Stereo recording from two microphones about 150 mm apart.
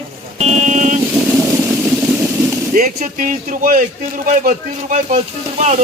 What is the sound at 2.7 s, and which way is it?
Speech, 65° right (ahead or behind).